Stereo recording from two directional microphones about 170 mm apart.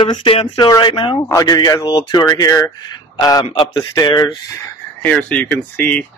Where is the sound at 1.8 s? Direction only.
30° left (ahead or behind).